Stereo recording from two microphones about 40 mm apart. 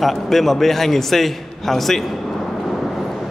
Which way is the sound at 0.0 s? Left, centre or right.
Centre.